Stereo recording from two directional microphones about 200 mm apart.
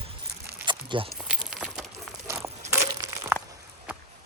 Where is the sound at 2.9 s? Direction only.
15° right (ahead or behind).